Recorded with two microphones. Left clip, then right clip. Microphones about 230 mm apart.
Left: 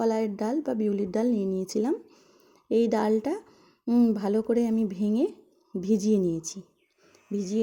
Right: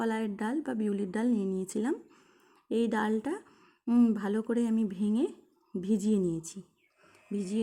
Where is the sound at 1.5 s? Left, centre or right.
Centre.